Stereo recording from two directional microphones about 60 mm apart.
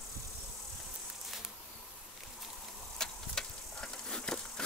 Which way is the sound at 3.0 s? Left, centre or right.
Centre.